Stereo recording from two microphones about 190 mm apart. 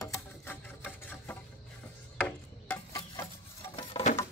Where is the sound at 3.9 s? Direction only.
30° left (ahead or behind).